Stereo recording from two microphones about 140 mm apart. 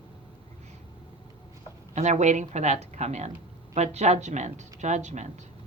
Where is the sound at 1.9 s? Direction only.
55° right (ahead or behind).